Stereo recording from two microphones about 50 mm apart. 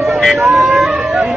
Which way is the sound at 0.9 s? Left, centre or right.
Centre.